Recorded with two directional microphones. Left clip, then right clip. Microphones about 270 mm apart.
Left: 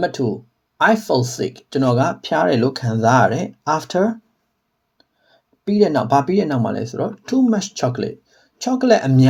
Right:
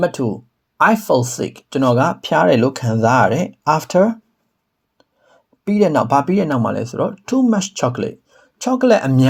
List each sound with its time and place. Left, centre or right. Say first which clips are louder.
0.0 s speech: right 2 dB; right